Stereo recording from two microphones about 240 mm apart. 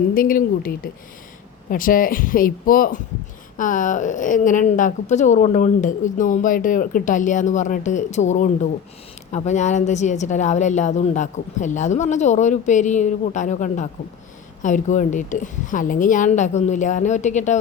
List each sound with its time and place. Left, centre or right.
0.1 s a woman's voice: left